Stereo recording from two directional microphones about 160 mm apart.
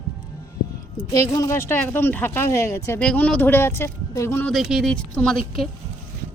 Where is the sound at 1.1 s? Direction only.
20° left (ahead or behind).